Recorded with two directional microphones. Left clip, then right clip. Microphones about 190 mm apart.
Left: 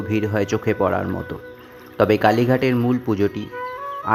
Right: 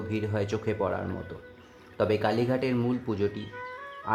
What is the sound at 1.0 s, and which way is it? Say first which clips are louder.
Speech: left 9 dB; 50° left (ahead or behind).